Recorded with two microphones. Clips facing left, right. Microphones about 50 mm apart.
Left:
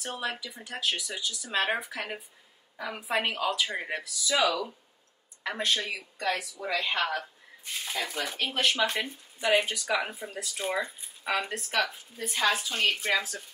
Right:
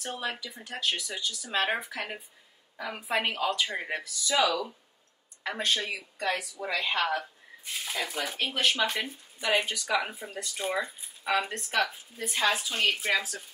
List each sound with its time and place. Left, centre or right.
0.0 s speech: centre
6.1 s speech: centre
6.6 s speech: centre